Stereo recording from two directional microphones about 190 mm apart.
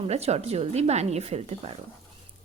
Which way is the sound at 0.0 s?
35° right (ahead or behind).